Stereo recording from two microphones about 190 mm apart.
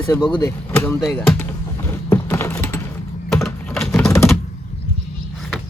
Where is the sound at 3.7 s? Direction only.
5° left (ahead or behind).